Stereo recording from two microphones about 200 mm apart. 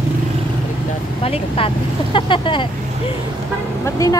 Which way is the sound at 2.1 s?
25° left (ahead or behind).